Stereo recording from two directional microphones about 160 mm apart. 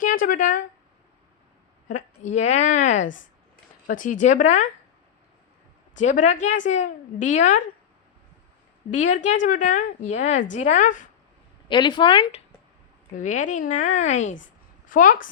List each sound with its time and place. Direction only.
0.0 s speech: 55° left (ahead or behind)
1.9 s a woman's voice: 50° left (ahead or behind)
6.0 s a woman's voice: 50° left (ahead or behind)
8.9 s a woman's voice: 50° left (ahead or behind)
11.7 s speech: 30° left (ahead or behind)
13.1 s a woman's voice: 50° left (ahead or behind)